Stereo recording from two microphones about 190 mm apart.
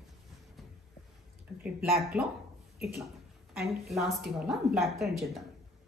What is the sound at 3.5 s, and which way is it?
A woman's voice, centre (ahead or behind).